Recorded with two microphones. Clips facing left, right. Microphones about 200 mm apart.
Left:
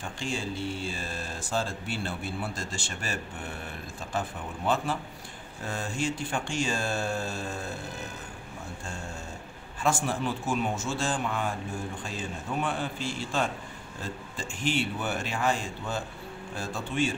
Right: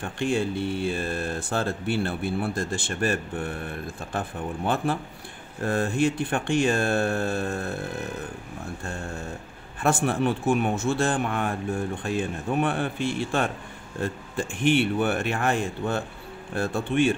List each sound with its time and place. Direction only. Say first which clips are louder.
0.0 s speech: right 8 dB; 60° right (ahead or behind)
9.8 s speech: right 5 dB; 60° right (ahead or behind)